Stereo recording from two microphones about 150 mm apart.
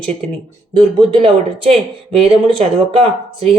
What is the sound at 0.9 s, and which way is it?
Speech, 35° right (ahead or behind).